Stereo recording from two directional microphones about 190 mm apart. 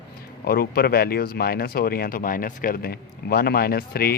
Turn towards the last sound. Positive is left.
turn(degrees=55)  # may be behind; listen again after turning